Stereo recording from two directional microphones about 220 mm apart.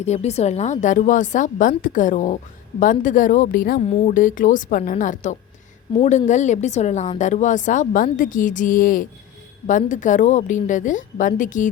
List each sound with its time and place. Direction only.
0.0 s a woman's voice: 30° left (ahead or behind)